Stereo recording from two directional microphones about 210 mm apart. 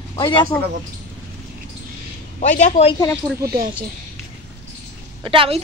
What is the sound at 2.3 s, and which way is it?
Speech, 35° left (ahead or behind).